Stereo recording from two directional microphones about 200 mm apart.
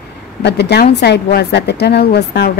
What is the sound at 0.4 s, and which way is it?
A woman's voice, 60° left (ahead or behind).